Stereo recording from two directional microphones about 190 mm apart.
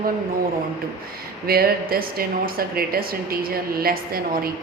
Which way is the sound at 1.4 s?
50° right (ahead or behind).